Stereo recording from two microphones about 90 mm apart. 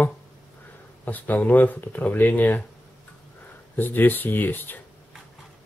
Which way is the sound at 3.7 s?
20° left (ahead or behind).